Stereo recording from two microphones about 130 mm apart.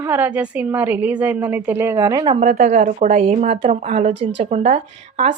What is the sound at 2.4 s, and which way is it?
Speech, 70° right (ahead or behind).